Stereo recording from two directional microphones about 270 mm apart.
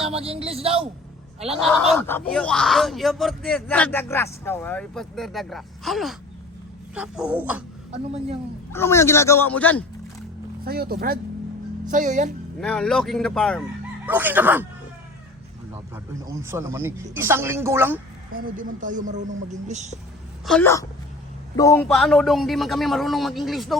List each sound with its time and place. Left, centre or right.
0.1 s speech: right
1.5 s speech: centre
7.9 s speech: right
8.7 s a man's voice: centre
10.6 s speech: right
12.5 s speech: centre
16.2 s speech: centre
18.5 s speech: right
20.4 s a man's voice: centre
21.8 s speech: centre